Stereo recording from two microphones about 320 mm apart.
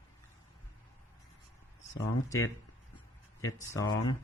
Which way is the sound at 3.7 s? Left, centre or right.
Centre.